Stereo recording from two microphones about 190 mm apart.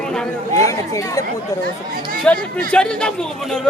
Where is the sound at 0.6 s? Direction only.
15° left (ahead or behind).